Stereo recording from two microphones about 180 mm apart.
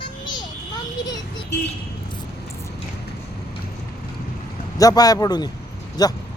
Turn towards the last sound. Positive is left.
turn(degrees=20)  # may be behind; listen again after turning